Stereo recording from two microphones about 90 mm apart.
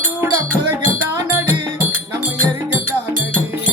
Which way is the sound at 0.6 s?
25° right (ahead or behind).